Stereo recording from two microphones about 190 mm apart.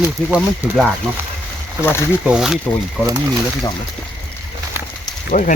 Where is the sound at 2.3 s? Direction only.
5° right (ahead or behind).